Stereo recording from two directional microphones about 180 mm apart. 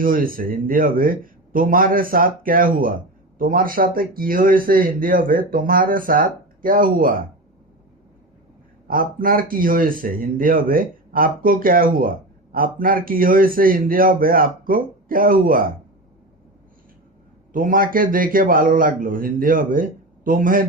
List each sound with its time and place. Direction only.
0.0 s speech: 50° right (ahead or behind)
8.9 s speech: 50° right (ahead or behind)
17.5 s speech: 50° right (ahead or behind)